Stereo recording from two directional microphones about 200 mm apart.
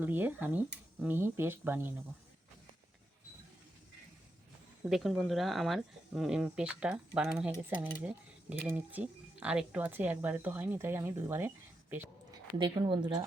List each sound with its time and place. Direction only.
0.0 s speech: 10° right (ahead or behind)
4.9 s speech: centre (ahead or behind)
12.5 s speech: 20° right (ahead or behind)